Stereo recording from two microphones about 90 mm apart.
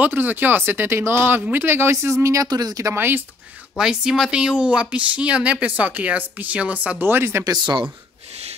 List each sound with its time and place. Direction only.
0.0 s speech: 20° right (ahead or behind)
2.4 s speech: 45° right (ahead or behind)
2.9 s speech: 25° right (ahead or behind)
3.7 s speech: 10° right (ahead or behind); by 7.4 s 30° right (ahead or behind)
7.4 s speech: 55° right (ahead or behind)